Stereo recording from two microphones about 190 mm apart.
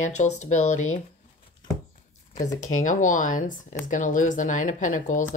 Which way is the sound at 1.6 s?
25° left (ahead or behind).